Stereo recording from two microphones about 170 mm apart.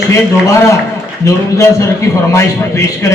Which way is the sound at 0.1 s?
15° left (ahead or behind).